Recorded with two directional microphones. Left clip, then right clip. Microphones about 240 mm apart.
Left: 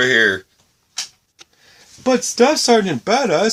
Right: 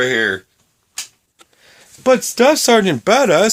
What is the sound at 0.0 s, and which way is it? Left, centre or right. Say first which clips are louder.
Speech: left 2 dB; centre.